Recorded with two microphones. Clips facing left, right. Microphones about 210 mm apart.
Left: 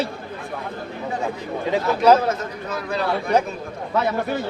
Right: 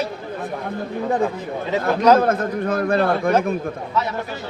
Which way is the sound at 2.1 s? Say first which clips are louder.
Right 5 dB; 55° right (ahead or behind).